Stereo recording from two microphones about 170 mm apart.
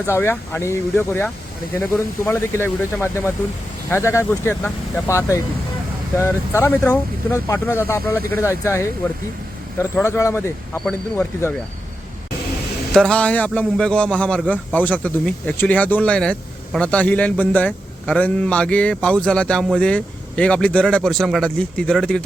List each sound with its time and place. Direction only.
0.0 s a man's voice: 15° left (ahead or behind)
10.8 s a man's voice: 5° left (ahead or behind)
12.9 s a man's voice: 5° left (ahead or behind)